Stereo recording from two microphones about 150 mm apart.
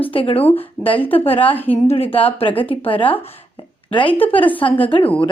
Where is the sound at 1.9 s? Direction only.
40° left (ahead or behind).